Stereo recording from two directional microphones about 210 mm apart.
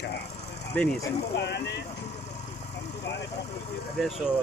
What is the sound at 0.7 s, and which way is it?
Speech, 5° left (ahead or behind).